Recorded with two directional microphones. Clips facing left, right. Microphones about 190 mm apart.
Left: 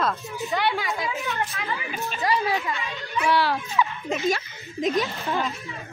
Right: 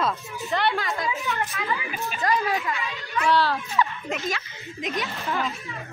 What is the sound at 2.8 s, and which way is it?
Speech, 20° left (ahead or behind).